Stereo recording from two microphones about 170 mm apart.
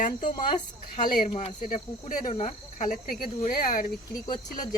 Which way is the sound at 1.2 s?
40° left (ahead or behind).